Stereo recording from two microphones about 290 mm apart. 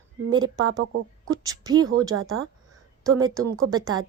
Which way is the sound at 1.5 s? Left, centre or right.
Centre.